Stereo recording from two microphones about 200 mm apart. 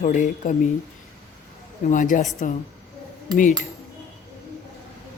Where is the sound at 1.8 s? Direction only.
40° left (ahead or behind).